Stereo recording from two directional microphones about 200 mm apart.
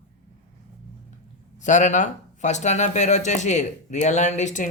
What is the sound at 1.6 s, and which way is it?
Speech, 40° left (ahead or behind).